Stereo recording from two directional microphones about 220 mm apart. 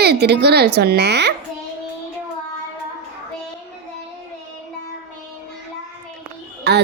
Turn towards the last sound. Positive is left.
turn(degrees=-50)  # may be behind; listen again after turning